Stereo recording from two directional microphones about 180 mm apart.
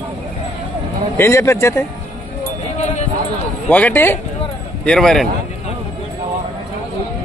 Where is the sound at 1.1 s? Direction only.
15° left (ahead or behind).